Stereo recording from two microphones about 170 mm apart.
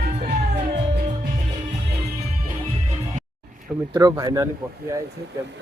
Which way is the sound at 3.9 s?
25° right (ahead or behind).